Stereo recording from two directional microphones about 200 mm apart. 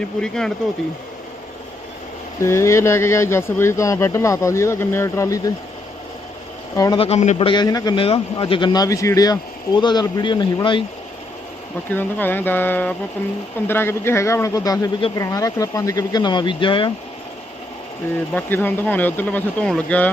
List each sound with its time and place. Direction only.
0.2 s speech: 5° left (ahead or behind)
2.4 s speech: 15° left (ahead or behind)
6.7 s a man's voice: 20° left (ahead or behind)
11.9 s speech: 10° left (ahead or behind); by 16.9 s 25° left (ahead or behind)
18.3 s speech: 10° left (ahead or behind)